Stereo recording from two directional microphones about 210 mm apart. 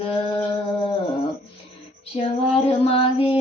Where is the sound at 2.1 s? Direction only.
30° left (ahead or behind).